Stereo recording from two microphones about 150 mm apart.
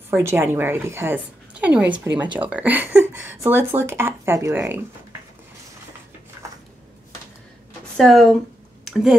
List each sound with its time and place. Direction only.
0.1 s speech: 15° right (ahead or behind)
8.0 s speech: 5° left (ahead or behind)
8.8 s a sound: 5° right (ahead or behind)